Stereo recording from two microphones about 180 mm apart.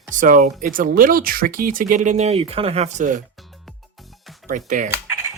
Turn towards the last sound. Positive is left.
turn(degrees=-15)  # may be behind; listen again after turning